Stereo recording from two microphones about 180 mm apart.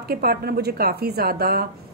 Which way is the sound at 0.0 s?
60° right (ahead or behind).